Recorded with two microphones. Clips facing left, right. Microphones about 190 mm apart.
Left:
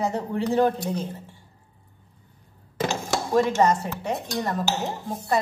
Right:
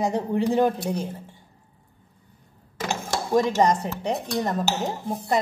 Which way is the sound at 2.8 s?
15° right (ahead or behind).